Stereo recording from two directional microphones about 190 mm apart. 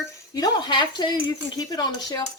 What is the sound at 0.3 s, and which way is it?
A woman's voice, 20° left (ahead or behind).